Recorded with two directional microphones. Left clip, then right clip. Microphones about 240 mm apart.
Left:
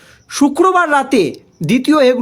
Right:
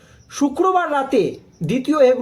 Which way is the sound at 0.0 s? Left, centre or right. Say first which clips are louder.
Left 7 dB; left.